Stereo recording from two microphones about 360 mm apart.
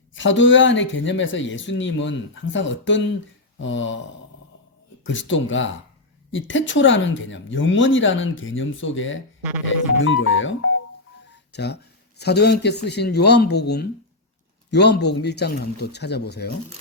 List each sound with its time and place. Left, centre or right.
0.1 s speech: left
5.0 s speech: left